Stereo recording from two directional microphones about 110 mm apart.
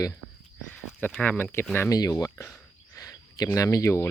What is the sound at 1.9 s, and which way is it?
Speech, 30° left (ahead or behind).